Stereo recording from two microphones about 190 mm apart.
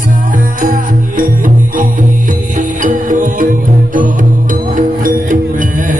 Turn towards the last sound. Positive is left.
turn(degrees=-45)  # may be behind; listen again after turning